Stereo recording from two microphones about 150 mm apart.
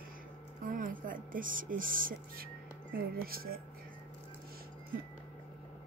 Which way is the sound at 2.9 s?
80° right.